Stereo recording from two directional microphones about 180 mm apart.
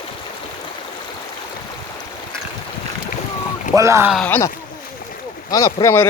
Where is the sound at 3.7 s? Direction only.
15° right (ahead or behind).